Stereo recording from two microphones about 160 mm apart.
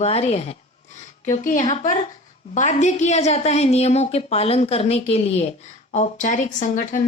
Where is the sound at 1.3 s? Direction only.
50° left (ahead or behind).